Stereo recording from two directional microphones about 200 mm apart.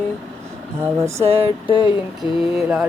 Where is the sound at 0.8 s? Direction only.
15° right (ahead or behind).